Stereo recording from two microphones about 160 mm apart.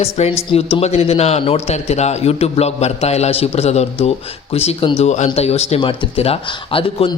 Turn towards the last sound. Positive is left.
turn(degrees=35)  # may be behind; listen again after turning